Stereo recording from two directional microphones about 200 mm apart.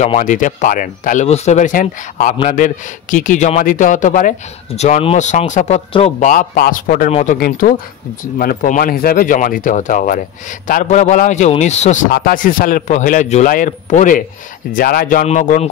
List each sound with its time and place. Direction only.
0.0 s a man's voice: 35° left (ahead or behind)
7.3 s a man's voice: 45° left (ahead or behind)
12.1 s a man's voice: 45° left (ahead or behind)